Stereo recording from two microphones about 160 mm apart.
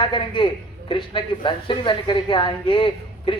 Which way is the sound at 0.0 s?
30° left (ahead or behind).